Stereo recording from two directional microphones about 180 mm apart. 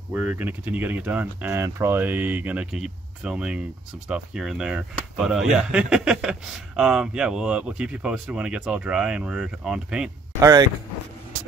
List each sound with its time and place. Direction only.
0.1 s speech: 5° right (ahead or behind)
10.4 s speech: 20° right (ahead or behind)